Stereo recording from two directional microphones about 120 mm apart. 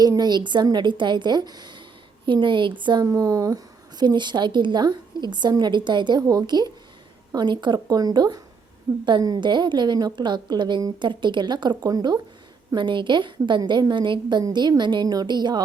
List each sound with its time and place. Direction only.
0.0 s a woman's voice: 35° right (ahead or behind)
12.7 s a woman's voice: 40° right (ahead or behind)